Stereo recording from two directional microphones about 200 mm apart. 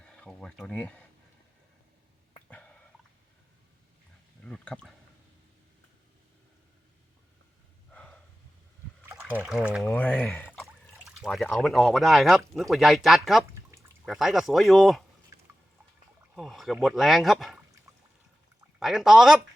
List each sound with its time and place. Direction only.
0.0 s speech: 5° left (ahead or behind)
2.5 s a sound: 5° left (ahead or behind)
4.4 s speech: 5° left (ahead or behind)
7.9 s snort: 5° left (ahead or behind)
9.0 s speech: 10° right (ahead or behind)
9.8 s speech: 5° left (ahead or behind)
13.5 s pour: 15° right (ahead or behind)
14.0 s speech: centre (ahead or behind)
16.3 s speech: centre (ahead or behind)
18.8 s speech: centre (ahead or behind)